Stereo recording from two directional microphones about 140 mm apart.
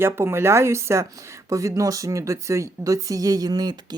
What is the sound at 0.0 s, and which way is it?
A woman's voice, 15° right (ahead or behind).